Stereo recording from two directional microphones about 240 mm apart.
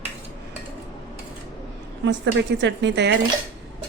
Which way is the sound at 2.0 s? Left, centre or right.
Right.